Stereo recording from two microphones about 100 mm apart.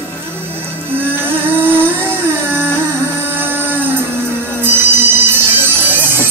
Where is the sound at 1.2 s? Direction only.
20° right (ahead or behind).